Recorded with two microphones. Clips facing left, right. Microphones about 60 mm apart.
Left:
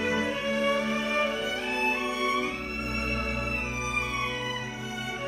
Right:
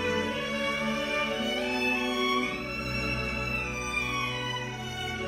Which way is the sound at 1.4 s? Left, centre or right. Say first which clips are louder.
Even; left.